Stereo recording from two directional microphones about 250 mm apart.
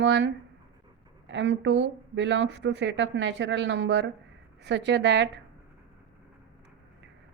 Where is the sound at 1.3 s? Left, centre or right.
Right.